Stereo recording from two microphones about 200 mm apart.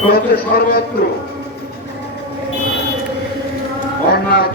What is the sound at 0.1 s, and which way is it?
Speech, 50° left (ahead or behind).